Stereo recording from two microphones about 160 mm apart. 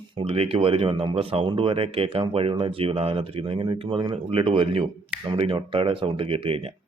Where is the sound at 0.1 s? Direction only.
35° right (ahead or behind).